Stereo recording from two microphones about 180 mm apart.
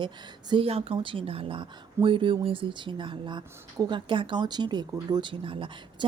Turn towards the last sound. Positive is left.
turn(degrees=-30)  # may be behind; listen again after turning